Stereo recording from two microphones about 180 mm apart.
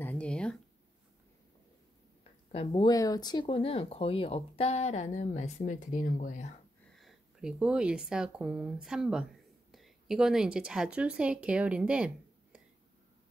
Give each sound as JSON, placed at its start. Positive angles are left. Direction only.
{"t": 0.0, "sound": "a sound", "side_deg": 5}
{"t": 2.5, "sound": "speech", "side_deg": 30}
{"t": 6.9, "sound": "speech", "side_deg": 0}